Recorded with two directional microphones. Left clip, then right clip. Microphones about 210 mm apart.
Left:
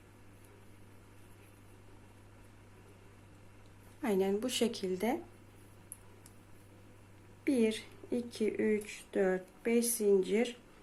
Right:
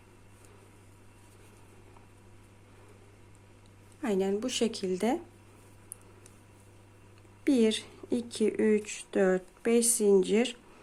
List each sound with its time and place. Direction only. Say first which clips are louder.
4.0 s a woman's voice: right 2 dB; 15° right (ahead or behind)
7.4 s speech: right 5 dB; 25° right (ahead or behind)